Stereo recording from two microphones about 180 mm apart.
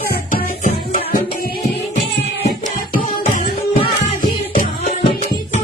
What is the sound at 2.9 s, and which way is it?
Music, 55° left (ahead or behind).